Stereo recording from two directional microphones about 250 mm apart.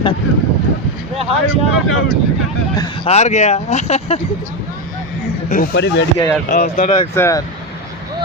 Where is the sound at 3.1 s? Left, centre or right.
Left.